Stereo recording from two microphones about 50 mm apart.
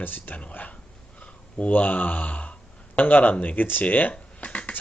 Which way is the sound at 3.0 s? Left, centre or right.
Left.